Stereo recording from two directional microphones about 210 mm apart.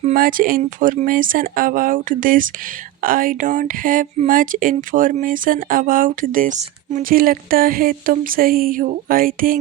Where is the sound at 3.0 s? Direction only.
40° right (ahead or behind).